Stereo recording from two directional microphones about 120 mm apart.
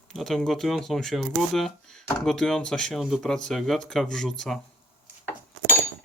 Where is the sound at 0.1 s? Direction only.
Centre (ahead or behind).